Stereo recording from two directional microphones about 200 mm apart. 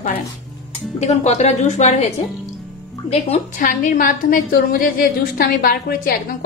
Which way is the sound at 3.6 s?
45° left (ahead or behind).